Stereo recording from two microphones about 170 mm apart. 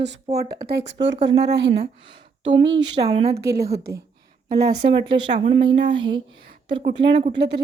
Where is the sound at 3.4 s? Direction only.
20° right (ahead or behind).